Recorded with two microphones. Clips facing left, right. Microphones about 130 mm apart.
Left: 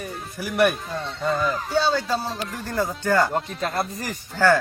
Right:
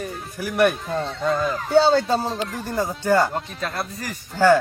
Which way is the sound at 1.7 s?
55° right (ahead or behind).